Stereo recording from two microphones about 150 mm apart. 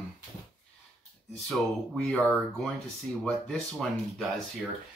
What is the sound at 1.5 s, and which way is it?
Speech, 5° left (ahead or behind).